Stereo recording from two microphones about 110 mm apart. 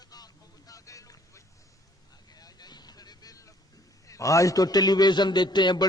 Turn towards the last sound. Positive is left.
turn(degrees=40)  # may be behind; listen again after turning